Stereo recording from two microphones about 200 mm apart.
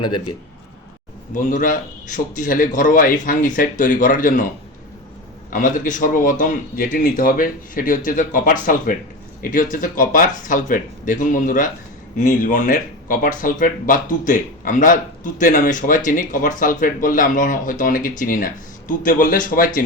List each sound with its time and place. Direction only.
1.3 s speech: 40° left (ahead or behind)
5.5 s a man's voice: 40° left (ahead or behind)